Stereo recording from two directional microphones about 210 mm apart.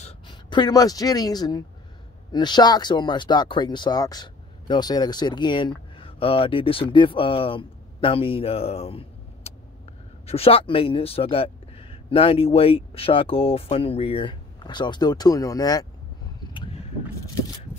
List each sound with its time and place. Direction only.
0.3 s speech: 20° left (ahead or behind)